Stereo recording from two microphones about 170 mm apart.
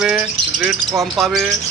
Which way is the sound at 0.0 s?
5° right (ahead or behind).